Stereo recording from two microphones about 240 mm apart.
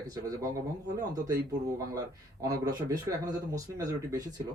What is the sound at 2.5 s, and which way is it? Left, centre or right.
Speech, centre.